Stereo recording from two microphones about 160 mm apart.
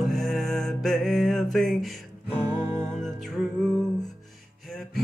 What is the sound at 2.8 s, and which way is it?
Music, 5° left (ahead or behind).